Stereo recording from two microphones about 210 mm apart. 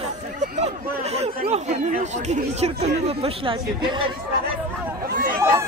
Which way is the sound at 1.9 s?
35° right (ahead or behind).